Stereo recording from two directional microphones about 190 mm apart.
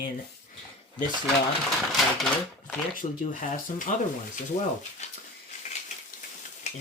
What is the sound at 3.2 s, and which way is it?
Speech, 45° left (ahead or behind).